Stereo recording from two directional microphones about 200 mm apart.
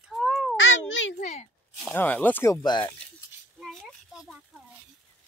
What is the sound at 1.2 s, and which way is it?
Speech, 35° left (ahead or behind).